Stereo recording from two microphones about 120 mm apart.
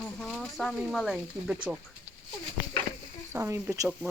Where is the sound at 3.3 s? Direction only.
25° right (ahead or behind).